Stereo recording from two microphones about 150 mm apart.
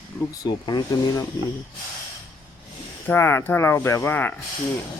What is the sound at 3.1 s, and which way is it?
Speech, 15° left (ahead or behind).